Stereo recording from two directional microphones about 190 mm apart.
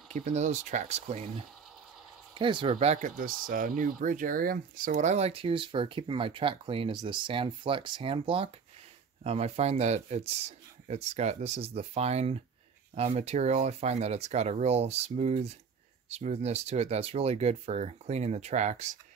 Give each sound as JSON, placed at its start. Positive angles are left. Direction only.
{"t": 0.1, "sound": "speech", "side_deg": -35}
{"t": 2.3, "sound": "speech", "side_deg": -25}